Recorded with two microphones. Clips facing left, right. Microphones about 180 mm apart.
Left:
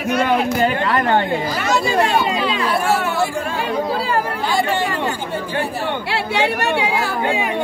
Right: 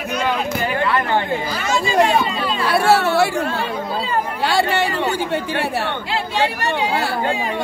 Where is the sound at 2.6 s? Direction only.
75° right (ahead or behind).